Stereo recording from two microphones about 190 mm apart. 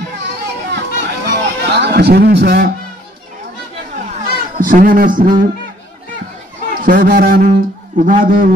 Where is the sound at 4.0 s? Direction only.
40° right (ahead or behind).